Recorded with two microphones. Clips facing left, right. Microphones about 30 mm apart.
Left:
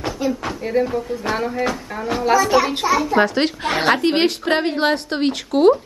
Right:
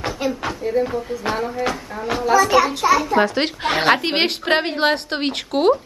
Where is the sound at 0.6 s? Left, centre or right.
Left.